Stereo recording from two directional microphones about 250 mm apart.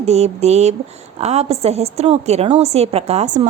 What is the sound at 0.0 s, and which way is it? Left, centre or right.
A woman's voice, right.